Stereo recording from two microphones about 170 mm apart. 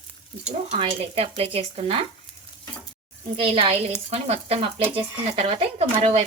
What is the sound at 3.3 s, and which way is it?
Speech, 30° right (ahead or behind).